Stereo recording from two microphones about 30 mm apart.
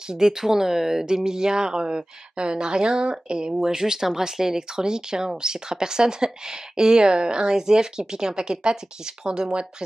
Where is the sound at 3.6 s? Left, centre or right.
Centre.